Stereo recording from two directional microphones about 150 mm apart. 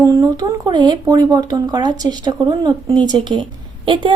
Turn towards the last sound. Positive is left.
turn(degrees=-35)  # may be behind; listen again after turning